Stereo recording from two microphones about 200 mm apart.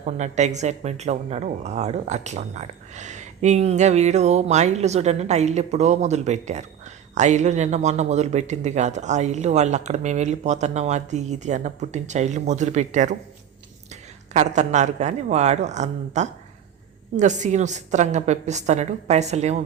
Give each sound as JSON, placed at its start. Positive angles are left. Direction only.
{"t": 0.0, "sound": "speech", "side_deg": -35}
{"t": 14.3, "sound": "speech", "side_deg": -35}